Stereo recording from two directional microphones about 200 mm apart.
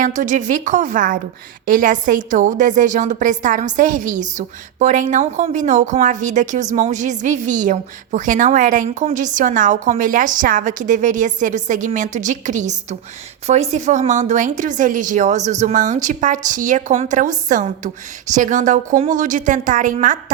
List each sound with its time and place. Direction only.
0.0 s a woman's voice: 40° right (ahead or behind)